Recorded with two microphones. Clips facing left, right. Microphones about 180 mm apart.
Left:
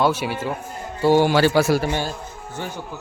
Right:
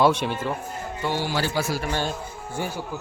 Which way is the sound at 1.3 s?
75° left (ahead or behind).